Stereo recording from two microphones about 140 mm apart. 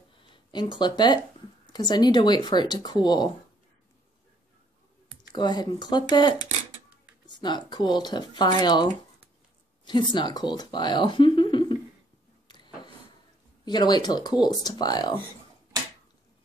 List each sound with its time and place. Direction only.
0.2 s speech: 35° left (ahead or behind)
5.3 s speech: 30° left (ahead or behind)
12.4 s a sound: 35° left (ahead or behind)
13.7 s speech: 30° left (ahead or behind)